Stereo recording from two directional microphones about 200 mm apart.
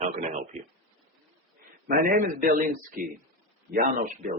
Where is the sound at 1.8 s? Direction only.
40° right (ahead or behind).